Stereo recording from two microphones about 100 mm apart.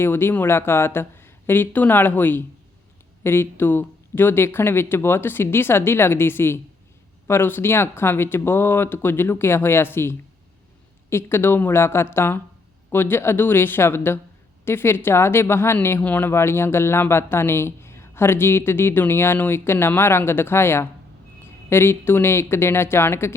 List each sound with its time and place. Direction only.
0.0 s speech: 20° left (ahead or behind)